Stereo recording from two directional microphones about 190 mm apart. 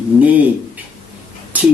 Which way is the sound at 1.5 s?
5° right (ahead or behind).